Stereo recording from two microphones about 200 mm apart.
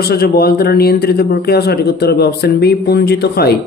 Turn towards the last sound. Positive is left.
turn(degrees=55)  # may be behind; listen again after turning